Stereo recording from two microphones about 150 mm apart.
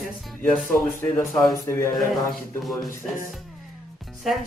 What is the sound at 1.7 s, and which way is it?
Speech, 15° left (ahead or behind).